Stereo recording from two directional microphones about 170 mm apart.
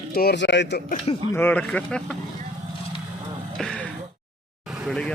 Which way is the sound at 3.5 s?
5° left (ahead or behind).